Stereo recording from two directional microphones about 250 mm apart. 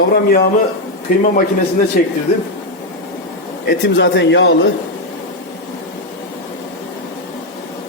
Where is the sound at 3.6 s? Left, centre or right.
Left.